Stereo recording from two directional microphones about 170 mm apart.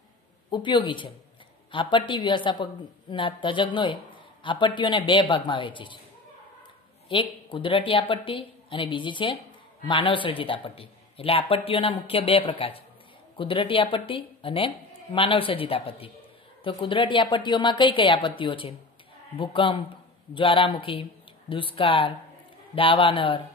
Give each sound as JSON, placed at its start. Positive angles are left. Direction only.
{"t": 0.5, "sound": "a woman's voice", "side_deg": 25}
{"t": 7.1, "sound": "a woman's voice", "side_deg": 30}